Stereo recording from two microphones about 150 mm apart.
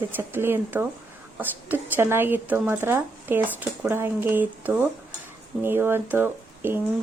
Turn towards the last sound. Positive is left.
turn(degrees=-15)  # may be behind; listen again after turning